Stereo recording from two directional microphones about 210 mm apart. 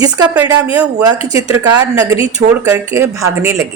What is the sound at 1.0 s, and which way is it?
A woman's voice, 15° right (ahead or behind).